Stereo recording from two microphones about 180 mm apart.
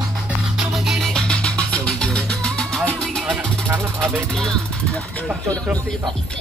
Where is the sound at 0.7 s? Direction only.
Centre (ahead or behind).